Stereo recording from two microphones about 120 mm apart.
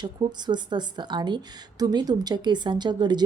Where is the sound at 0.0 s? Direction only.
35° right (ahead or behind).